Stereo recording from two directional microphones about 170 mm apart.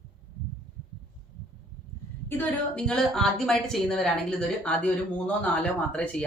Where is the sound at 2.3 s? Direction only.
10° left (ahead or behind).